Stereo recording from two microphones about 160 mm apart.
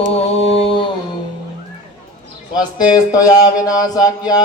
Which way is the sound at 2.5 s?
25° left (ahead or behind).